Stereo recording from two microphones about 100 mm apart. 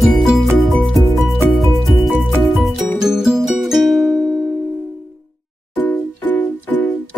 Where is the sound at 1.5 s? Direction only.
Centre (ahead or behind).